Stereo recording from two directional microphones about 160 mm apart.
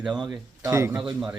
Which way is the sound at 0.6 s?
20° right (ahead or behind).